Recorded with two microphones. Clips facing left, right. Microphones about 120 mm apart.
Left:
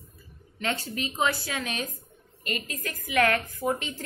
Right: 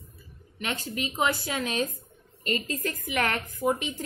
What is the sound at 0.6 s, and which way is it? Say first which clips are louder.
A woman's voice: left 1 dB; 20° right (ahead or behind).